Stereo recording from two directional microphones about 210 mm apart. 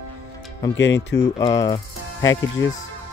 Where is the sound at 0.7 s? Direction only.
60° left (ahead or behind).